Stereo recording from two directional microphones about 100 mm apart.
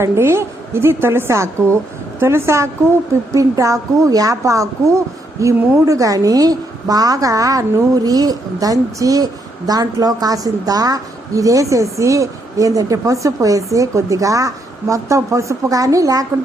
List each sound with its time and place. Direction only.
0.0 s a woman's voice: 25° right (ahead or behind)